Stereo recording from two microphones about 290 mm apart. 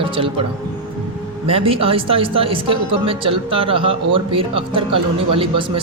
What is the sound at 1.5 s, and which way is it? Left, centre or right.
Speech, centre.